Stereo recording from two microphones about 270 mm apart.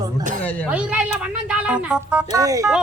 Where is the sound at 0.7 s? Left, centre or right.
Centre.